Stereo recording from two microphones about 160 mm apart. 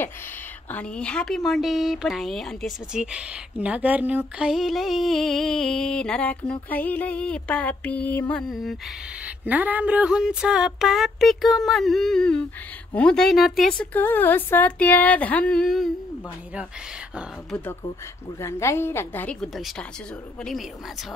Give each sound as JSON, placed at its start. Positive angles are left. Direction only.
{"t": 0.7, "sound": "a woman's voice", "side_deg": 10}
{"t": 9.2, "sound": "a woman's voice", "side_deg": -10}
{"t": 18.4, "sound": "speech", "side_deg": 15}